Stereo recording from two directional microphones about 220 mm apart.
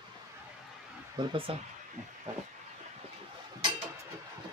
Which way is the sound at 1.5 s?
25° right (ahead or behind).